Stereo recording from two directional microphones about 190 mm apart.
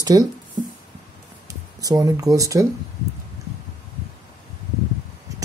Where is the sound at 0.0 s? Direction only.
20° right (ahead or behind).